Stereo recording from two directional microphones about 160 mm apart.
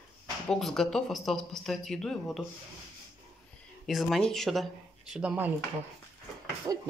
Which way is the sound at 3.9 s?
Centre (ahead or behind).